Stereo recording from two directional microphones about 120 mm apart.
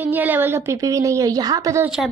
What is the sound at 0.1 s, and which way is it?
A woman's voice, 15° right (ahead or behind).